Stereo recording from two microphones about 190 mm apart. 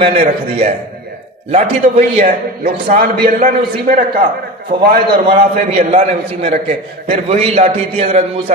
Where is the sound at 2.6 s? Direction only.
50° right (ahead or behind).